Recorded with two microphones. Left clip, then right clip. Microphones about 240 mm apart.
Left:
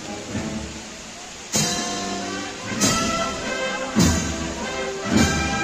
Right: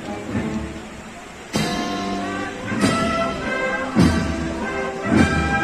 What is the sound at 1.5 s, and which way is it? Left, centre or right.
Music, left.